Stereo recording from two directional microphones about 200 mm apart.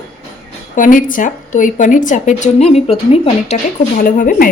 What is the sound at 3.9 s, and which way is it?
Speech, 45° left (ahead or behind).